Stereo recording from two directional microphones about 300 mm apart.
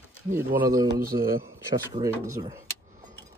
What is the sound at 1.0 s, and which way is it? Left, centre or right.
Speech, right.